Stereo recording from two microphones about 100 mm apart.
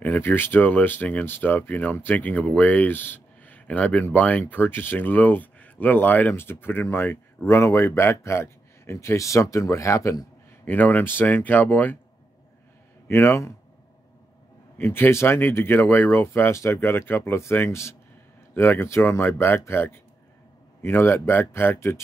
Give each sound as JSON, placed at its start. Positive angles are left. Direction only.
{"t": 0.0, "sound": "speech", "side_deg": 20}
{"t": 10.6, "sound": "speech", "side_deg": 15}
{"t": 13.1, "sound": "speech", "side_deg": 25}
{"t": 14.8, "sound": "speech", "side_deg": 20}